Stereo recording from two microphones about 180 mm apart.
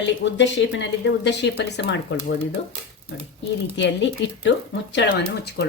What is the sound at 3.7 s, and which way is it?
Speech, 90° left.